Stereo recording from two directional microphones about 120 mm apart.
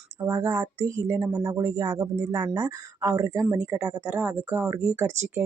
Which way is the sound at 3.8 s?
5° right (ahead or behind).